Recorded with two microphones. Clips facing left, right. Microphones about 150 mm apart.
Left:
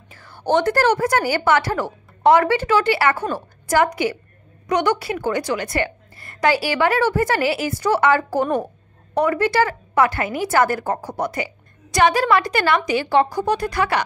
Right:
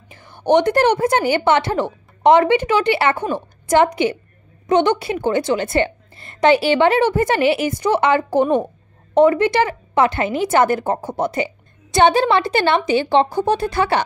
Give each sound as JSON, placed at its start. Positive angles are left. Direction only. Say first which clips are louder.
{"t": 0.1, "sound": "a woman's voice", "louder": "right 4 dB", "side_deg": -20}